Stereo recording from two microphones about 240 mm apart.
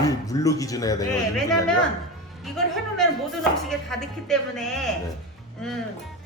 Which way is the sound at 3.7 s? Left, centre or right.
Centre.